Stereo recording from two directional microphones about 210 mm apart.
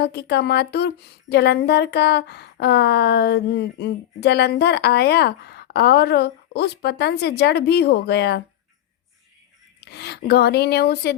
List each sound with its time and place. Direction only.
0.0 s a woman's voice: 50° left (ahead or behind)
9.8 s a woman's voice: 50° left (ahead or behind)